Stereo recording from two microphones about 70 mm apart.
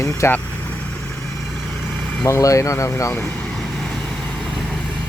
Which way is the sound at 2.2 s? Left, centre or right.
Left.